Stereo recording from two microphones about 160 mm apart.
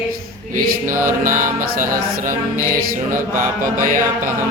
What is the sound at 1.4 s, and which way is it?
Music, 55° right (ahead or behind).